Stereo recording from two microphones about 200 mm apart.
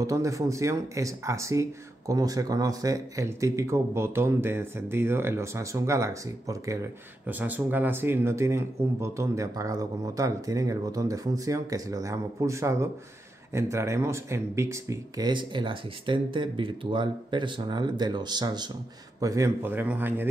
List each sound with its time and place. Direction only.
0.0 s speech: 15° right (ahead or behind)